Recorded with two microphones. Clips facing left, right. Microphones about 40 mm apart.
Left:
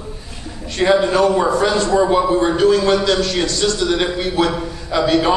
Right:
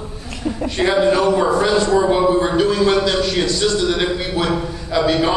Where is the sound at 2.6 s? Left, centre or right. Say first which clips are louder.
Left 2 dB; centre.